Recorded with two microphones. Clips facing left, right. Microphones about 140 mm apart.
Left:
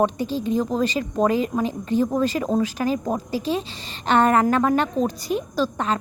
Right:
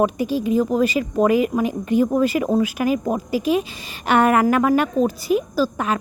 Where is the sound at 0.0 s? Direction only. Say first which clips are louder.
Right 2 dB; 10° right (ahead or behind).